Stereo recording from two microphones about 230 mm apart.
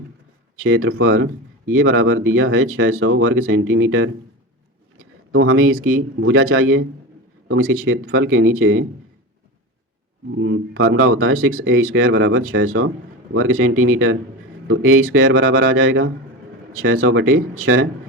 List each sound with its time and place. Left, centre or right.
0.6 s speech: right
10.3 s speech: right